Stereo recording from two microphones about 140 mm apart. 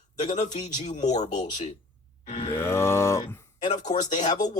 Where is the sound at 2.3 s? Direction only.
50° left (ahead or behind).